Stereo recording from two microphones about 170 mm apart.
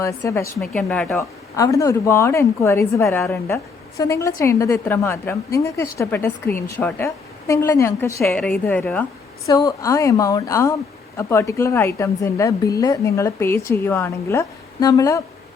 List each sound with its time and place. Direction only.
0.0 s speech: 15° left (ahead or behind)
0.6 s speech: 5° left (ahead or behind)
9.5 s a woman's voice: 20° left (ahead or behind)